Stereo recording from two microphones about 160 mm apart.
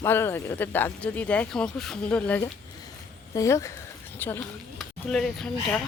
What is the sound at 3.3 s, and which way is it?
Speech, 20° left (ahead or behind).